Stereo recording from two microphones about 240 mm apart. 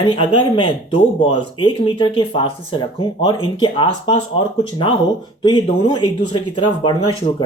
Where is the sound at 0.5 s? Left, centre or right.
Left.